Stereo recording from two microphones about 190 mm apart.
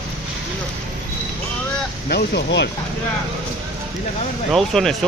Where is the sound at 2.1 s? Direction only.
60° left (ahead or behind).